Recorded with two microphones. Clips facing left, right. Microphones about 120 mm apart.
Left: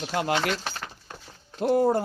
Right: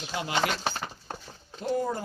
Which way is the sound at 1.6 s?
60° left (ahead or behind).